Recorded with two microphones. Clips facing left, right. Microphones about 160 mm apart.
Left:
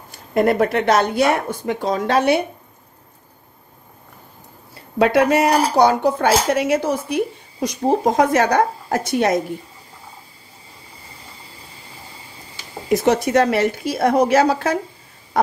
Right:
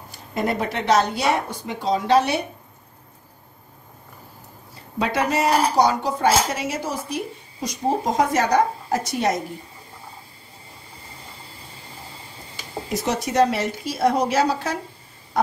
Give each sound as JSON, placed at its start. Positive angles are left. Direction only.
{"t": 0.3, "sound": "speech", "side_deg": 60}
{"t": 4.9, "sound": "speech", "side_deg": 60}
{"t": 13.0, "sound": "speech", "side_deg": 55}